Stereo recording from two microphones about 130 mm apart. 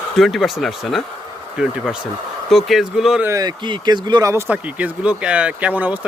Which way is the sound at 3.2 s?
30° right (ahead or behind).